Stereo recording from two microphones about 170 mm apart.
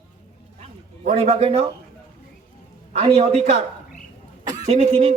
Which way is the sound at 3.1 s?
40° right (ahead or behind).